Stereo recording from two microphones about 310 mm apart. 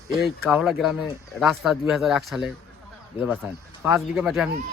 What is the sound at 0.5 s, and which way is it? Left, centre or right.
Speech, centre.